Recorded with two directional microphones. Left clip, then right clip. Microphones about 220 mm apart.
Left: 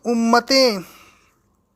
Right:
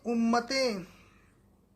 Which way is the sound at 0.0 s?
50° left (ahead or behind).